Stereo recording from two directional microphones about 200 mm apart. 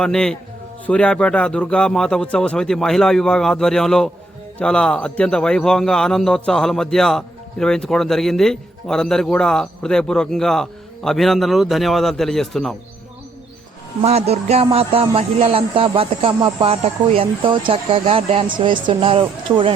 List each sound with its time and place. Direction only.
0.0 s a man's voice: 5° left (ahead or behind)
14.0 s music: 30° right (ahead or behind)
15.1 s speech: 30° right (ahead or behind)